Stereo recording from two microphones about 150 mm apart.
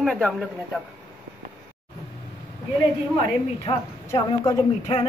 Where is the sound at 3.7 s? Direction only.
35° left (ahead or behind).